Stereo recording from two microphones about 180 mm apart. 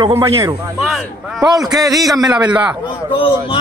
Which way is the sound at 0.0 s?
15° right (ahead or behind).